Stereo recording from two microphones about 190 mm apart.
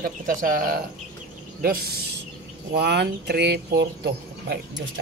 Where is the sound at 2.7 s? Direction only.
60° right (ahead or behind).